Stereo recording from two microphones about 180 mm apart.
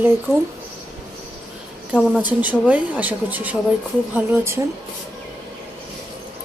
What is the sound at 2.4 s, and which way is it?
Speech, 10° right (ahead or behind).